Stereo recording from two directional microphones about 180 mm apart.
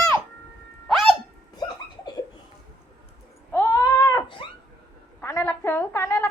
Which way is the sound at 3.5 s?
15° left (ahead or behind).